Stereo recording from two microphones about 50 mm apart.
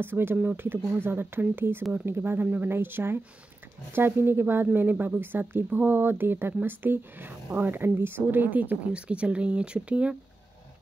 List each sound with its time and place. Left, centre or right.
0.0 s speech: right
2.4 s speech: right